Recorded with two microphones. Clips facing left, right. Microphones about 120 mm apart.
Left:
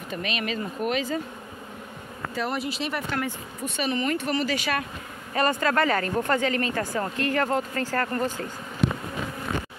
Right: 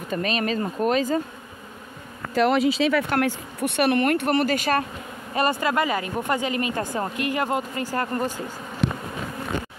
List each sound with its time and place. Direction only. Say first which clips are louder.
0.1 s speech: right 5 dB; 40° right (ahead or behind)
2.3 s speech: right 10 dB; 90° right
3.1 s speech: right 6 dB; 75° right (ahead or behind); by 4.8 s 45° right (ahead or behind)
5.3 s speech: right 1 dB; 15° right (ahead or behind)